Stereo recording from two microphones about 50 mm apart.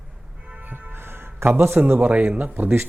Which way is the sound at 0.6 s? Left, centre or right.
Right.